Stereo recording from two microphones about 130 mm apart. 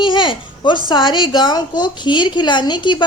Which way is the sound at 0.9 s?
35° left (ahead or behind).